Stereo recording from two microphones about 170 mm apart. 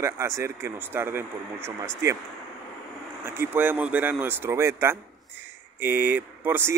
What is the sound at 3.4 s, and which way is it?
Speech, 10° right (ahead or behind).